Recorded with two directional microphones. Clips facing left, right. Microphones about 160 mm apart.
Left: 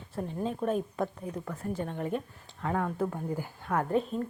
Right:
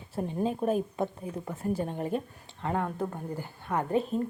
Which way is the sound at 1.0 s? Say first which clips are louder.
Right 1 dB; 25° right (ahead or behind).